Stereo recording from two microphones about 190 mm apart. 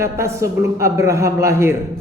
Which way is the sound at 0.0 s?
15° right (ahead or behind).